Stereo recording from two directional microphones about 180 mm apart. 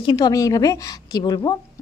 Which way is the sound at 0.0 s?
25° left (ahead or behind).